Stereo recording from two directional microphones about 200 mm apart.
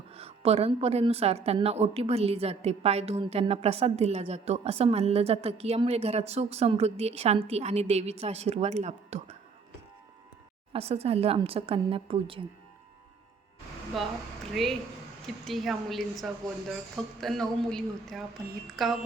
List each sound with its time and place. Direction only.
0.1 s a woman's voice: 30° right (ahead or behind)
10.7 s speech: 30° right (ahead or behind)
14.0 s a woman's voice: centre (ahead or behind)